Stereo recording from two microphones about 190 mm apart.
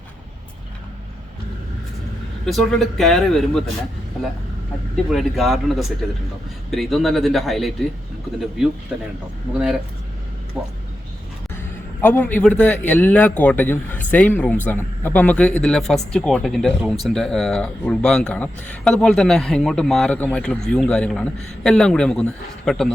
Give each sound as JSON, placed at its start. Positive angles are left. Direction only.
{"t": 2.4, "sound": "a man's voice", "side_deg": 0}
{"t": 5.1, "sound": "a man's voice", "side_deg": 0}
{"t": 12.0, "sound": "a man's voice", "side_deg": 10}